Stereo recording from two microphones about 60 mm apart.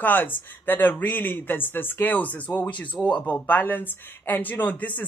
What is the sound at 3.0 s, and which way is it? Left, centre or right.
Speech, centre.